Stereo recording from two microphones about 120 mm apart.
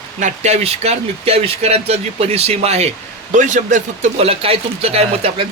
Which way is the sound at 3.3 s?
90° right.